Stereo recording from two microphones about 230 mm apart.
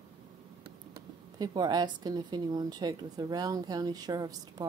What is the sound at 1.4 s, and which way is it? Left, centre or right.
A woman's voice, centre.